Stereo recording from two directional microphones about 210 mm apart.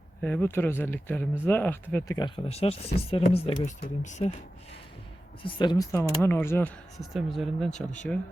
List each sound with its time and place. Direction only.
0.2 s speech: 10° left (ahead or behind); by 4.3 s 35° left (ahead or behind)
5.4 s speech: 25° left (ahead or behind); by 8.2 s 5° left (ahead or behind)